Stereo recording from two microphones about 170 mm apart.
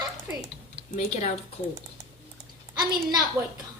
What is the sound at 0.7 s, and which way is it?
Speech, 45° left (ahead or behind).